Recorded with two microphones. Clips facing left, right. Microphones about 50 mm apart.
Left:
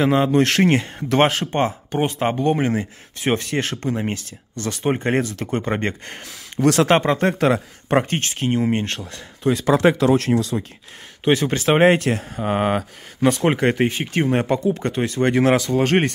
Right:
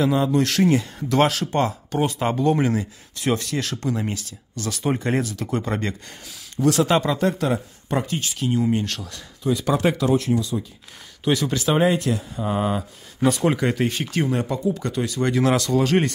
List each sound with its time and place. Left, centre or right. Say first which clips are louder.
0.0 s speech: left 3 dB; left
7.0 s speech: left 2 dB; left
7.4 s speech: left 5 dB; left
9.4 s speech: left 4 dB; left
10.0 s speech: left 3 dB; left
11.2 s speech: left 3 dB; left
13.3 s speech: left 3 dB; left
13.8 s speech: left 3 dB; left
14.3 s speech: left 4 dB; left
14.8 s speech: left 3 dB; left
15.5 s speech: left 2 dB; centre
15.8 s speech: left 2 dB; left